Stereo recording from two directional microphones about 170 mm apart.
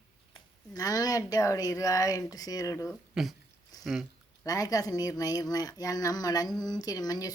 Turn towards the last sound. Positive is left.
turn(degrees=20)  # may be behind; listen again after turning